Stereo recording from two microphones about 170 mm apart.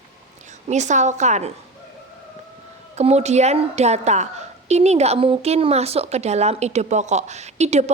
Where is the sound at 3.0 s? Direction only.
40° right (ahead or behind).